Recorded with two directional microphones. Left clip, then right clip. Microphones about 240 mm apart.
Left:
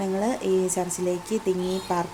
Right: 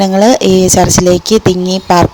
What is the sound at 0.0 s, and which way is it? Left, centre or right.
Speech, right.